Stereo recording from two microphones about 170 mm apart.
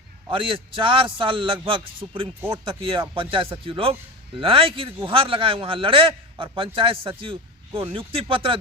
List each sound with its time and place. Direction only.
0.3 s a man's voice: 30° right (ahead or behind)